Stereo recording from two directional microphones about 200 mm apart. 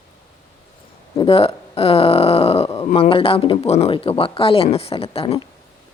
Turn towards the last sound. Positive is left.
turn(degrees=30)  # may be behind; listen again after turning